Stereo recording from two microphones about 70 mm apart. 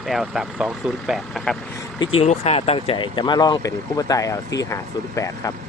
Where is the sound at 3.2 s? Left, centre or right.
Left.